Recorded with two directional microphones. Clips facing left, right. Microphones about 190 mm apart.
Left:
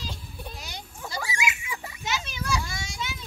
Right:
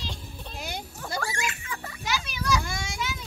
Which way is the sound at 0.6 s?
55° right (ahead or behind).